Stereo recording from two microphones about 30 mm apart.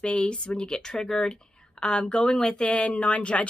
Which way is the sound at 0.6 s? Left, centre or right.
Left.